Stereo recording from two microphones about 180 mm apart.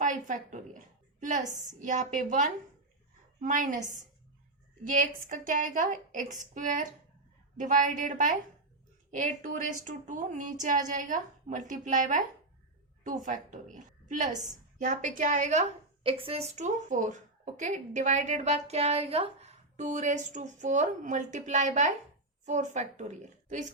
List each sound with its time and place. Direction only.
0.0 s a woman's voice: 45° right (ahead or behind)
13.2 s a woman's voice: 45° right (ahead or behind)
16.0 s a woman's voice: 30° right (ahead or behind)